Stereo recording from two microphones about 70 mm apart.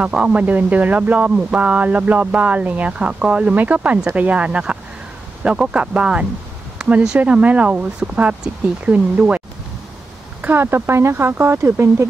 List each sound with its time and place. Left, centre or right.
0.2 s speech: centre
10.4 s speech: right